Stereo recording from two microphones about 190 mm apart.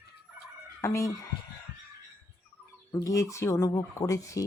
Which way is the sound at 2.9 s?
15° left (ahead or behind).